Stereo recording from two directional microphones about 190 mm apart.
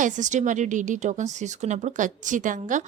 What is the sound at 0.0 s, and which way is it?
Speech, 40° right (ahead or behind).